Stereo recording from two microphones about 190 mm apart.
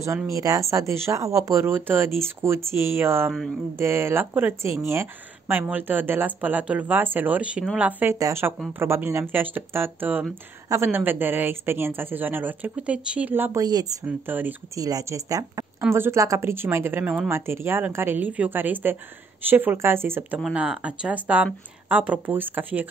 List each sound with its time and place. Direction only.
0.0 s speech: 15° right (ahead or behind)
14.0 s speech: 10° right (ahead or behind)